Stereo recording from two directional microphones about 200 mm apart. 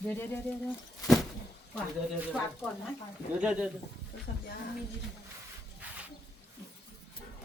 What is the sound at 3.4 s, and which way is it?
Speech, 5° right (ahead or behind).